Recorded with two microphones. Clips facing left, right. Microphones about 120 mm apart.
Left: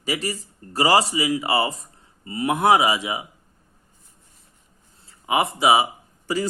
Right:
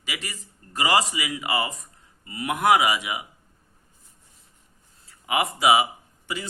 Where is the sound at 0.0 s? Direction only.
35° left (ahead or behind).